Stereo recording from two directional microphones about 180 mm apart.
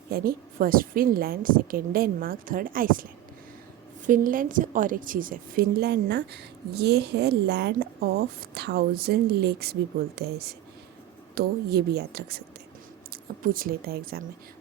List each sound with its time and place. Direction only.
0.1 s a woman's voice: 55° right (ahead or behind)
13.4 s a woman's voice: 50° right (ahead or behind)